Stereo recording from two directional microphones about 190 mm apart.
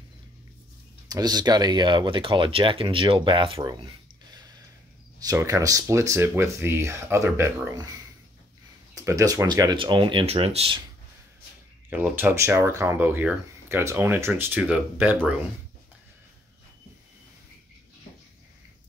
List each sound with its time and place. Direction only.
1.0 s speech: 20° right (ahead or behind)
8.9 s speech: 15° right (ahead or behind)
11.9 s speech: 10° right (ahead or behind)